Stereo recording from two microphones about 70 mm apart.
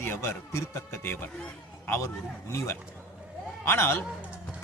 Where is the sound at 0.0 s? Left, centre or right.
Left.